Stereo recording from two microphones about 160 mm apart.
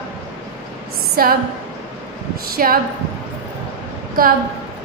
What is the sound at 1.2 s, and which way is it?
Speech, 70° right (ahead or behind).